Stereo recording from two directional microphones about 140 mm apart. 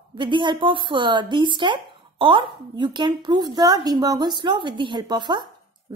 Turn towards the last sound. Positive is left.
turn(degrees=-30)  # may be behind; listen again after turning